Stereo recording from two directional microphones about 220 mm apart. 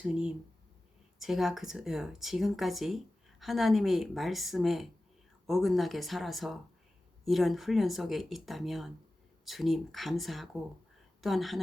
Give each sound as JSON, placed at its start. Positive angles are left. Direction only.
{"t": 0.0, "sound": "speech", "side_deg": -5}